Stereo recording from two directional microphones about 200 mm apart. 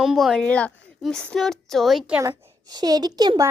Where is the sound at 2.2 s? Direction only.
15° right (ahead or behind).